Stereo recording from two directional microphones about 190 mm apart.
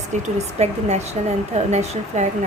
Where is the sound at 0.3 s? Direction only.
35° right (ahead or behind).